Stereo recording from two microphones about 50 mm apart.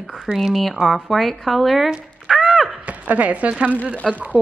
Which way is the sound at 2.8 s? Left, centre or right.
Right.